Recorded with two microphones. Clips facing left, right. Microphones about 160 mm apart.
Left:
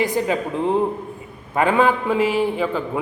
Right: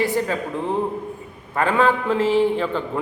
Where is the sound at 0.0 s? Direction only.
15° left (ahead or behind).